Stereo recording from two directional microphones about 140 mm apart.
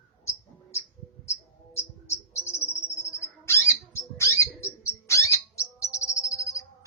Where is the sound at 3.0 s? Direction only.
20° left (ahead or behind).